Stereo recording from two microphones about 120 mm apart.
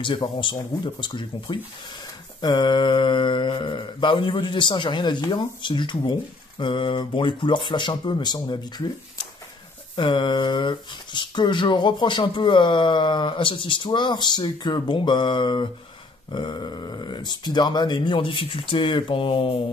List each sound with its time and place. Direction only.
0.0 s speech: 45° left (ahead or behind)
9.9 s speech: 40° left (ahead or behind)